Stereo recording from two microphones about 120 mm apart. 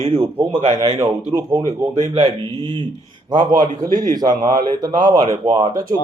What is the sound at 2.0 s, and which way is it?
Speech, 65° right (ahead or behind).